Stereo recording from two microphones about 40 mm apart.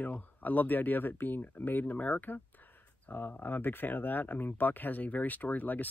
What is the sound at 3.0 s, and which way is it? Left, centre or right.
Speech, left.